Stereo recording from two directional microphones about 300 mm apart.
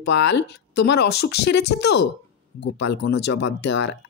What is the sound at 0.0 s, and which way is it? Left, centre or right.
Speech, left.